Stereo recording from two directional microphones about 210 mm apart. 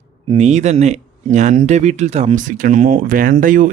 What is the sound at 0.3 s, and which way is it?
Speech, 35° right (ahead or behind).